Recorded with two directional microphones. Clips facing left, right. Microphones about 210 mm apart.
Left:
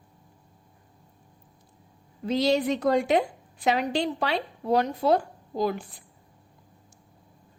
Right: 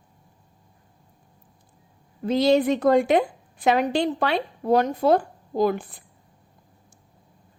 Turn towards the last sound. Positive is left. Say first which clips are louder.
# right 5 dB
turn(degrees=-55)  # may be behind; listen again after turning